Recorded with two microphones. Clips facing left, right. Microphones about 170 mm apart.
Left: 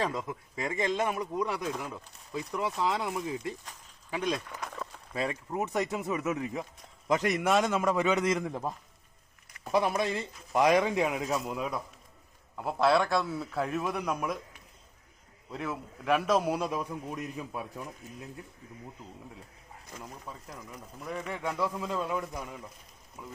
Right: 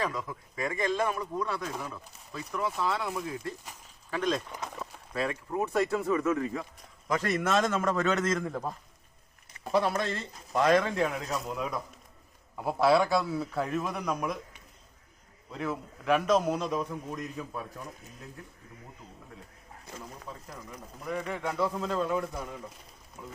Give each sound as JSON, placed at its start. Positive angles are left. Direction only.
{"t": 0.0, "sound": "speech", "side_deg": 25}
{"t": 4.4, "sound": "speech", "side_deg": -15}
{"t": 5.1, "sound": "speech", "side_deg": 20}
{"t": 9.7, "sound": "a man's voice", "side_deg": 15}
{"t": 21.8, "sound": "speech", "side_deg": 5}